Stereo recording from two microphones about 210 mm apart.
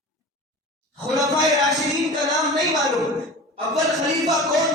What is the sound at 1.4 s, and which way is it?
Speech, 15° right (ahead or behind).